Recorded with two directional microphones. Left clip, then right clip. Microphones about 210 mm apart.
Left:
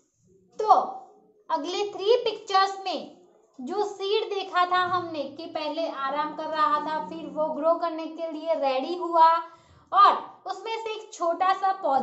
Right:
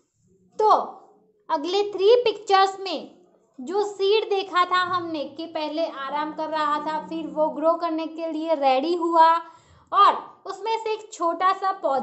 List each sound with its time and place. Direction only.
1.5 s a child's voice: 50° right (ahead or behind)